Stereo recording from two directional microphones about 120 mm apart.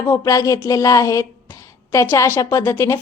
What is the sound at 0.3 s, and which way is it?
Speech, 30° left (ahead or behind).